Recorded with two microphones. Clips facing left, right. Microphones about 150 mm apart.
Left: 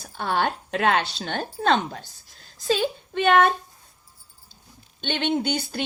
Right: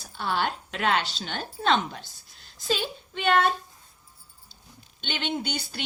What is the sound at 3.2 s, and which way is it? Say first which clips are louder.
Speech: left 5 dB; 55° left (ahead or behind).